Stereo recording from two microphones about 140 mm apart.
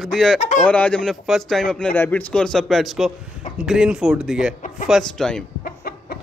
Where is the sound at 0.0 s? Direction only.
5° left (ahead or behind).